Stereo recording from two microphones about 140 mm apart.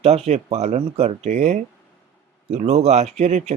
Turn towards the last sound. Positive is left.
turn(degrees=-55)  # may be behind; listen again after turning